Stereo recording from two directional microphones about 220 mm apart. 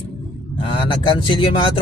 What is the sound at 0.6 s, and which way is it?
Speech, 20° left (ahead or behind).